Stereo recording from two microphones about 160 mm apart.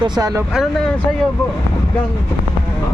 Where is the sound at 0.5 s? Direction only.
Centre (ahead or behind).